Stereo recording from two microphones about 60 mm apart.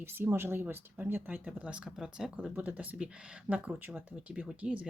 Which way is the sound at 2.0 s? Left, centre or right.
Centre.